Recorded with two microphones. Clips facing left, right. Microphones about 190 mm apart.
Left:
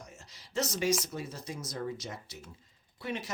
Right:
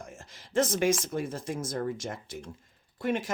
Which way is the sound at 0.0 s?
50° right (ahead or behind).